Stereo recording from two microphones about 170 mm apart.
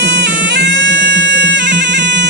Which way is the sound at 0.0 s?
90° right.